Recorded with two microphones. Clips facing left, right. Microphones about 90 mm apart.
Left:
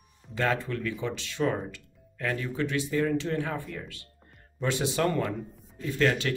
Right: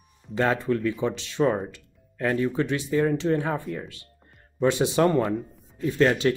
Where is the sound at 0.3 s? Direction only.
25° right (ahead or behind).